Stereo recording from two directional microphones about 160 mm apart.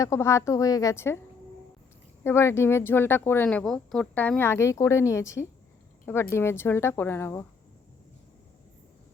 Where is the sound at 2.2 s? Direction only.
15° left (ahead or behind).